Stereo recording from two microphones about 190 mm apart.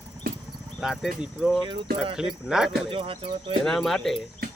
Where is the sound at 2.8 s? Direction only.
30° right (ahead or behind).